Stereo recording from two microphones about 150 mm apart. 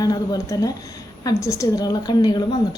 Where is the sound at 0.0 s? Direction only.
25° left (ahead or behind).